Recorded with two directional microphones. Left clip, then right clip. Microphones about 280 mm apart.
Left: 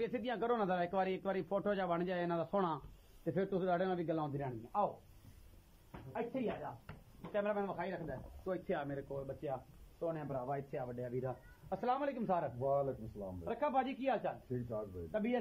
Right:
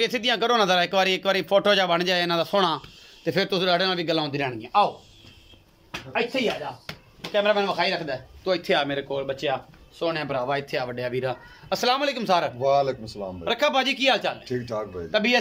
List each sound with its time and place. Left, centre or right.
0.0 s a man's voice: right
7.3 s speech: centre
9.1 s speech: right
9.9 s speech: right
12.5 s a man's voice: right
13.4 s speech: right
14.7 s a man's voice: right